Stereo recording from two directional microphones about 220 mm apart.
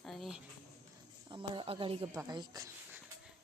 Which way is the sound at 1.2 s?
20° right (ahead or behind).